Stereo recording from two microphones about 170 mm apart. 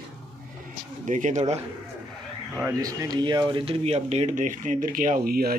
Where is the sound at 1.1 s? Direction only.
45° right (ahead or behind).